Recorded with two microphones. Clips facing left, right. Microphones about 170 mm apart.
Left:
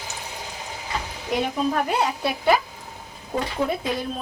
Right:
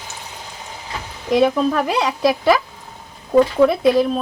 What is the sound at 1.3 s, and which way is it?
Speech, 85° right.